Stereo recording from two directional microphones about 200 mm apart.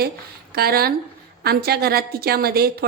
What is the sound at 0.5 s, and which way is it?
A woman's voice, 50° right (ahead or behind).